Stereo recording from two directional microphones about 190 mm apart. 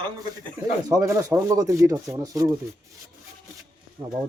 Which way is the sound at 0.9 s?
15° right (ahead or behind).